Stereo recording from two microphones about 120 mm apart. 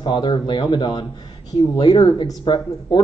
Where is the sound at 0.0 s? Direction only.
40° left (ahead or behind).